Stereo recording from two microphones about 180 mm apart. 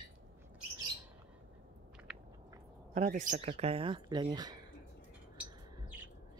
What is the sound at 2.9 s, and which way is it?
Speech, 40° right (ahead or behind).